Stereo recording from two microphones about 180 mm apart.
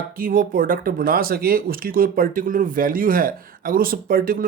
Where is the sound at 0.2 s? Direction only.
50° right (ahead or behind).